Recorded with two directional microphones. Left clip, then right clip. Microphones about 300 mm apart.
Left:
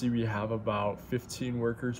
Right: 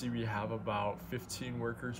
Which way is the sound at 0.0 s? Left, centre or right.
Centre.